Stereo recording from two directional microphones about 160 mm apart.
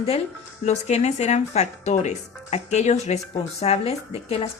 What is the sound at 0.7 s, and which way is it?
Speech, 45° left (ahead or behind).